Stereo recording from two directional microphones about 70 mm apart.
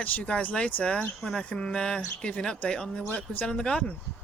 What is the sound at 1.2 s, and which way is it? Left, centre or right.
Speech, centre.